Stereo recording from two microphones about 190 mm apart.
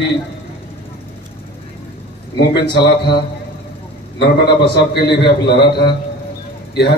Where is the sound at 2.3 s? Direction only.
60° left (ahead or behind).